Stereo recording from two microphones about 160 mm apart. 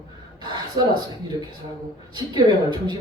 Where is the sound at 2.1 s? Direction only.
25° right (ahead or behind).